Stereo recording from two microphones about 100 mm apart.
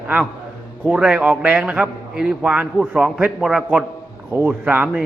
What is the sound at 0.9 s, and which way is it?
A man's voice, 10° right (ahead or behind).